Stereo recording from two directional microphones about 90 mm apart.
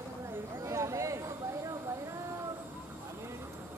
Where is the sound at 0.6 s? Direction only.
35° right (ahead or behind).